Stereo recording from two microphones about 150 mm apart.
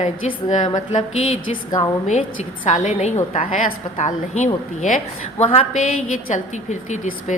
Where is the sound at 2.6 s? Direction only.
50° left (ahead or behind).